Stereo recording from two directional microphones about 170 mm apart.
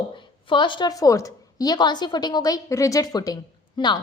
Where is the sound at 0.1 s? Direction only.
30° left (ahead or behind).